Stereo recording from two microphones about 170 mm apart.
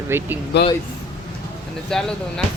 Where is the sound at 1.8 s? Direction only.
5° left (ahead or behind).